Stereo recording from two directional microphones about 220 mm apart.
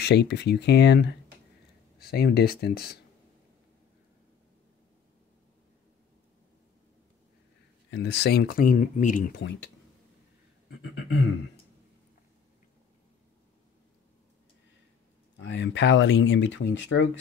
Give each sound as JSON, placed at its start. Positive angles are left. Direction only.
{"t": 0.0, "sound": "speech", "side_deg": 50}
{"t": 7.9, "sound": "speech", "side_deg": 50}
{"t": 15.3, "sound": "speech", "side_deg": 55}